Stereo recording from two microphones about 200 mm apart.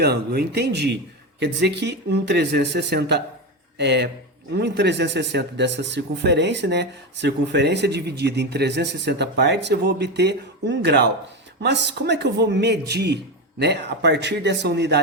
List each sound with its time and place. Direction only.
0.0 s a man's voice: 55° right (ahead or behind)